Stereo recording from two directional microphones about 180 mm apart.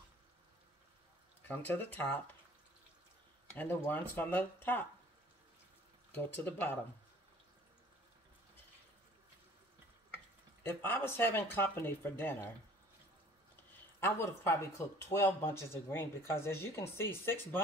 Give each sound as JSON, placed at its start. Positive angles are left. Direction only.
{"t": 1.5, "sound": "speech", "side_deg": 10}
{"t": 3.5, "sound": "speech", "side_deg": 10}
{"t": 6.1, "sound": "speech", "side_deg": 10}
{"t": 10.6, "sound": "speech", "side_deg": 10}
{"t": 13.9, "sound": "speech", "side_deg": 15}